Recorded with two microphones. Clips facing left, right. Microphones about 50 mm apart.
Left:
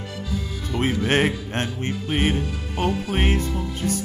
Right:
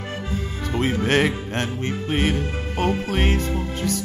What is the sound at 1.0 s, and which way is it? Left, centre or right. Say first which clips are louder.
Music: right 1 dB; left.